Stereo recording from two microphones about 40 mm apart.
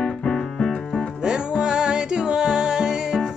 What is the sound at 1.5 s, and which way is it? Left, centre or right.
Music, centre.